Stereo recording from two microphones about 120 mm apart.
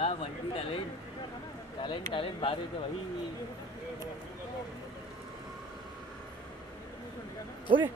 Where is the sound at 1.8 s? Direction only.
45° left (ahead or behind).